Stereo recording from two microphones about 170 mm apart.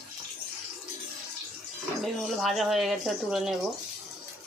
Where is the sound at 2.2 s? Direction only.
Centre (ahead or behind).